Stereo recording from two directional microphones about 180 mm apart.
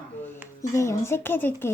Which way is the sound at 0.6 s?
15° left (ahead or behind).